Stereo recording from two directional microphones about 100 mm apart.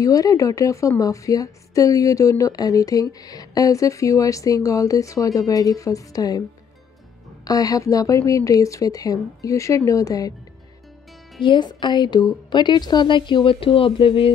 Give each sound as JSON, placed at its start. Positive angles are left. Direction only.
{"t": 0.0, "sound": "a woman's voice", "side_deg": 35}
{"t": 7.4, "sound": "a woman's voice", "side_deg": 40}
{"t": 11.4, "sound": "a woman's voice", "side_deg": 50}